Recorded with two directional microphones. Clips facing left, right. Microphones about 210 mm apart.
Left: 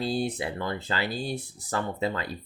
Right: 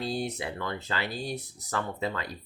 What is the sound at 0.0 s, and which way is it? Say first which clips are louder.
Speech: left 3 dB; 30° left (ahead or behind).